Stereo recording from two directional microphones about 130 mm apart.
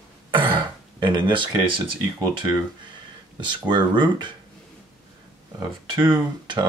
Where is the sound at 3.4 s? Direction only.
35° right (ahead or behind).